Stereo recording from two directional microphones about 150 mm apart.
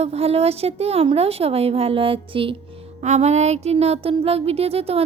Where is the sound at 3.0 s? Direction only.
50° right (ahead or behind).